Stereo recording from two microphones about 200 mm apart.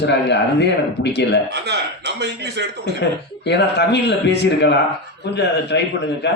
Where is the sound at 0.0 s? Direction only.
60° left (ahead or behind).